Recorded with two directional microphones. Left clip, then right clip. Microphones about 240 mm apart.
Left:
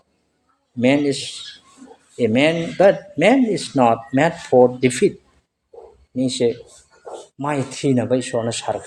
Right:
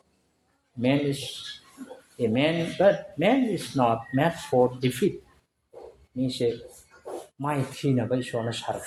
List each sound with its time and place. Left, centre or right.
0.8 s speech: left
6.1 s speech: left